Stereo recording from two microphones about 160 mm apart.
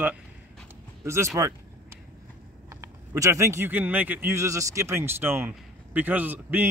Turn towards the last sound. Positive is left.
turn(degrees=-10)  # may be behind; listen again after turning